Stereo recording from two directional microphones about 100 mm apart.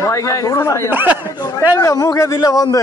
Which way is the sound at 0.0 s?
30° left (ahead or behind).